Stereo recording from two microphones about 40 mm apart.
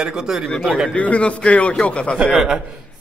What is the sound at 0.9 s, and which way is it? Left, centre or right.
Speech, left.